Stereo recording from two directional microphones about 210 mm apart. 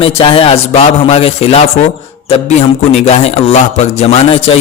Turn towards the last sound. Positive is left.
turn(degrees=30)  # may be behind; listen again after turning